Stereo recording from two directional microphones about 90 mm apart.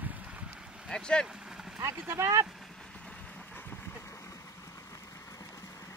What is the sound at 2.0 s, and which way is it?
Speech, 30° right (ahead or behind).